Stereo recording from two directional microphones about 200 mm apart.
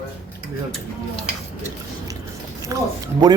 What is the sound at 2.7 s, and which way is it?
Speech, 15° right (ahead or behind).